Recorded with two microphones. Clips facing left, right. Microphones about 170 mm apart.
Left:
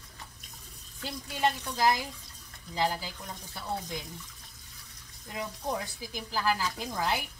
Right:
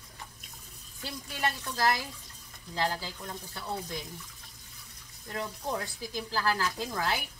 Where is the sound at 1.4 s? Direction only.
15° left (ahead or behind).